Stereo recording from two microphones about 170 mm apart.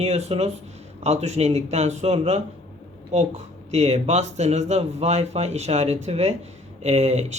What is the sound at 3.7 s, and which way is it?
Speech, 40° right (ahead or behind).